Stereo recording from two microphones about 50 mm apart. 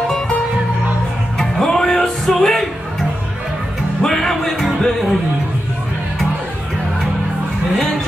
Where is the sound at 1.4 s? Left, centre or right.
Centre.